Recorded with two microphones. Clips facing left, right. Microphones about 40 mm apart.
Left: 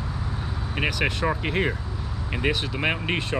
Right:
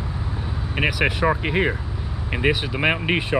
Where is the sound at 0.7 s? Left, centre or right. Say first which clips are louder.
Right 4 dB; centre.